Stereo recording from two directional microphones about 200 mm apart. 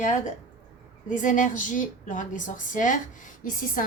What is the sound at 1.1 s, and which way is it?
A woman's voice, 40° left (ahead or behind).